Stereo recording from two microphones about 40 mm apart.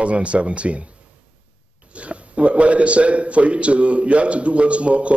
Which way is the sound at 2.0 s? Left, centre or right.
Right.